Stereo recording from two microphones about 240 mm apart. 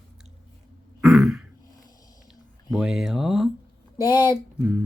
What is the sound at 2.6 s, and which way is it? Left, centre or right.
Speech, centre.